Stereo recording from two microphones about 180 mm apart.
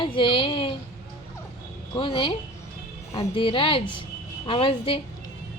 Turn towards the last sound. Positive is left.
turn(degrees=30)  # may be behind; listen again after turning